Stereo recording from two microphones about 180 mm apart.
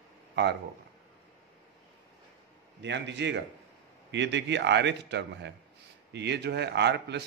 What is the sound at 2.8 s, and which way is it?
A man's voice, 75° right (ahead or behind).